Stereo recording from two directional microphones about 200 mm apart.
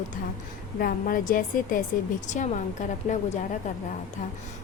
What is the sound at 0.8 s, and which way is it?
A woman's voice, 45° left (ahead or behind).